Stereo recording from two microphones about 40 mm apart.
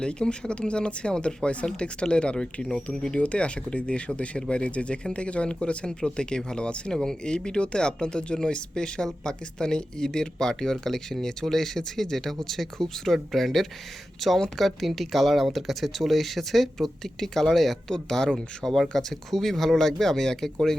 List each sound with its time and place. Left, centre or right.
0.0 s speech: left
6.9 s speech: centre
17.9 s speech: centre